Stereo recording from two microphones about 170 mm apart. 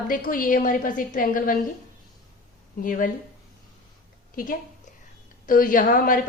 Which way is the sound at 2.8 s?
50° left (ahead or behind).